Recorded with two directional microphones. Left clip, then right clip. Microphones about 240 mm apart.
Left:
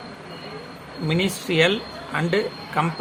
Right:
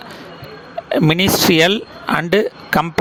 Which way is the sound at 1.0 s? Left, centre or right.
Right.